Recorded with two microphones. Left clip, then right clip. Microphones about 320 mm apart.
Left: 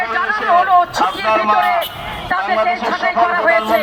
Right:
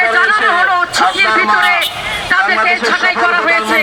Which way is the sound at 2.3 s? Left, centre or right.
Left.